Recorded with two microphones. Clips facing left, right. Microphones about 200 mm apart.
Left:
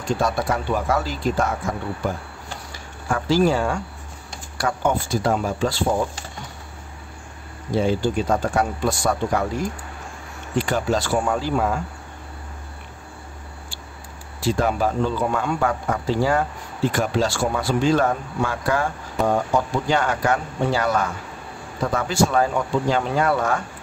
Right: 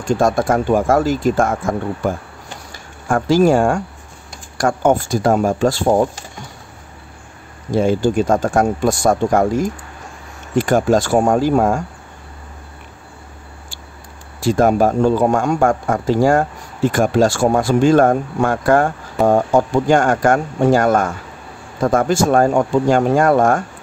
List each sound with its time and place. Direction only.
0.2 s speech: 45° right (ahead or behind)
7.7 s speech: 45° right (ahead or behind)
14.4 s speech: 45° right (ahead or behind)